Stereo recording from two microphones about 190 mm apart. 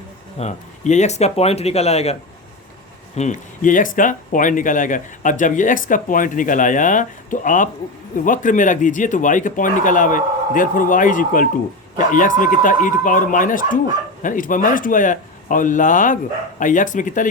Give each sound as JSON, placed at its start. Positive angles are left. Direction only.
{"t": 0.3, "sound": "speech", "side_deg": 35}
{"t": 3.2, "sound": "speech", "side_deg": 40}